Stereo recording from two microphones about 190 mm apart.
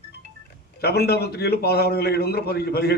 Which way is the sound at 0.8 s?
60° left (ahead or behind).